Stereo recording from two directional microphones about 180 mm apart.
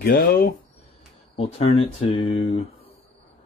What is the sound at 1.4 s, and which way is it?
Speech, 35° left (ahead or behind).